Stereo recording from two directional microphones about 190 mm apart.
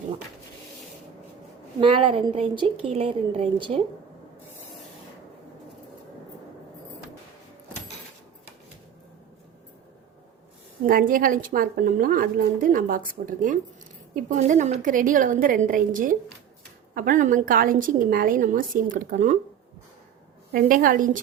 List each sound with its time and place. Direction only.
1.8 s a woman's voice: 25° right (ahead or behind)
10.8 s a woman's voice: 50° right (ahead or behind)
20.5 s a woman's voice: 50° right (ahead or behind)